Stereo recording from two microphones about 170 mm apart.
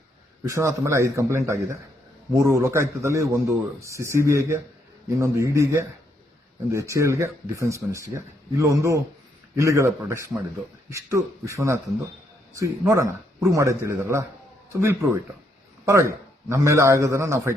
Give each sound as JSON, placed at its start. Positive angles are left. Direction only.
{"t": 0.4, "sound": "speech", "side_deg": -15}